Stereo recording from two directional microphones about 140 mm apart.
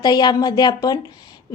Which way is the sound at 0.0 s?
30° left (ahead or behind).